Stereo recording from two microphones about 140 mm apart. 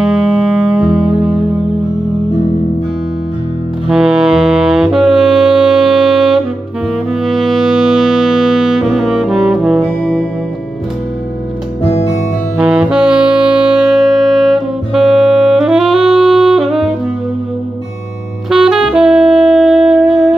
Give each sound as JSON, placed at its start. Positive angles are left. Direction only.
{"t": 0.0, "sound": "music", "side_deg": -5}
{"t": 3.8, "sound": "saxophone", "side_deg": -5}
{"t": 7.2, "sound": "brass instrument", "side_deg": 0}
{"t": 11.8, "sound": "music", "side_deg": 50}
{"t": 12.5, "sound": "saxophone", "side_deg": -5}
{"t": 18.5, "sound": "saxophone", "side_deg": -5}